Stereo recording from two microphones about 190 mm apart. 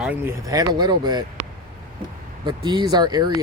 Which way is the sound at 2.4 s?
20° right (ahead or behind).